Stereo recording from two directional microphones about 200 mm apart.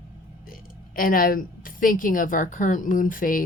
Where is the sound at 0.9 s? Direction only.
45° left (ahead or behind).